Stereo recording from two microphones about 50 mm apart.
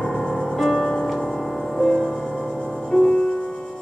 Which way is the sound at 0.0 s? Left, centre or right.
Centre.